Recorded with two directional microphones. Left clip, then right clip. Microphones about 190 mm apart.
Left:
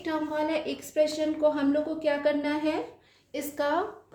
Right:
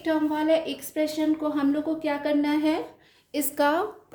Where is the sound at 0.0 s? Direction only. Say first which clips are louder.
Right 4 dB; 35° right (ahead or behind).